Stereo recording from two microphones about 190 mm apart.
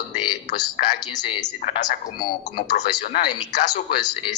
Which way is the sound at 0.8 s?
40° left (ahead or behind).